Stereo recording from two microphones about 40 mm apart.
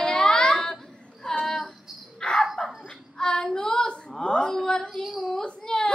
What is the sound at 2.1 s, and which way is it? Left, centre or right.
Bird, centre.